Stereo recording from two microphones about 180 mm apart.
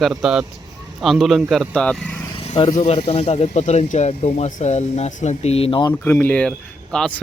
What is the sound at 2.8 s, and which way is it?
Speech, 30° left (ahead or behind).